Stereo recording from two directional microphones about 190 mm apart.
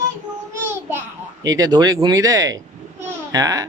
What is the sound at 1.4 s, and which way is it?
Speech, 20° right (ahead or behind).